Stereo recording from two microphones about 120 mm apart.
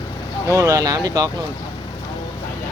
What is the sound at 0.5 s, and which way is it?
Speech, 25° right (ahead or behind).